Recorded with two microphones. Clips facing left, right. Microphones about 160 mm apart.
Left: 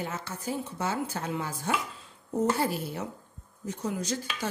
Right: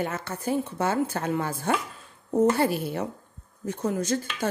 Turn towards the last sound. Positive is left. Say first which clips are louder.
# right 5 dB
turn(degrees=-50)  # may be behind; listen again after turning